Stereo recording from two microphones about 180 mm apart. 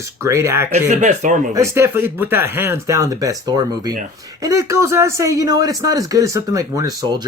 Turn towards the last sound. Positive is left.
turn(degrees=-20)  # may be behind; listen again after turning